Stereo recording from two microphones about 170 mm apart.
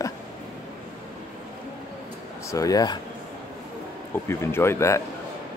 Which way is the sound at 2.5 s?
20° left (ahead or behind).